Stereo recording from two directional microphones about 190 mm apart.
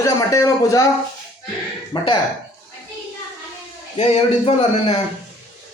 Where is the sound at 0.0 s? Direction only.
15° left (ahead or behind).